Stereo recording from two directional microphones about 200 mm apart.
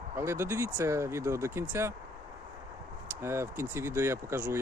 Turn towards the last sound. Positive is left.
turn(degrees=-10)  # may be behind; listen again after turning